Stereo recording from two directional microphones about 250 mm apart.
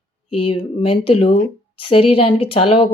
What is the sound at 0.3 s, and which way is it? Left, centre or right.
Speech, left.